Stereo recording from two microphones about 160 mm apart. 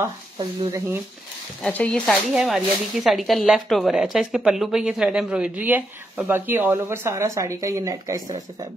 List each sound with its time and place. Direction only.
0.7 s speech: 20° right (ahead or behind)
1.6 s speech: 5° left (ahead or behind); by 8.6 s 25° right (ahead or behind)